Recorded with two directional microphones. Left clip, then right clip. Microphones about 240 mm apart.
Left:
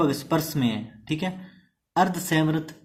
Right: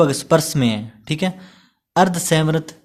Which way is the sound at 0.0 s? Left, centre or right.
Right.